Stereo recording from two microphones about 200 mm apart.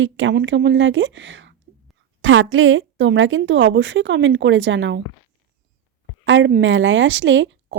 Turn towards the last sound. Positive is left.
turn(degrees=-65)  # may be behind; listen again after turning